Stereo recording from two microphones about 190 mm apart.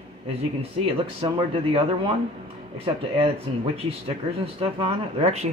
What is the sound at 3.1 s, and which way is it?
Speech, 30° right (ahead or behind).